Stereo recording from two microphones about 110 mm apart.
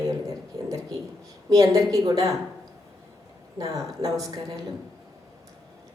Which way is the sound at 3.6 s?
30° right (ahead or behind).